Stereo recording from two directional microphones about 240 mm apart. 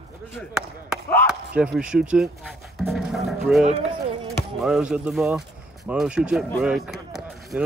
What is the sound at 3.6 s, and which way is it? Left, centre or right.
Speech, right.